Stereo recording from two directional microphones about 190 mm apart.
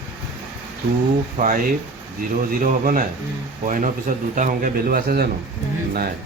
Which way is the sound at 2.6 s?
45° right (ahead or behind).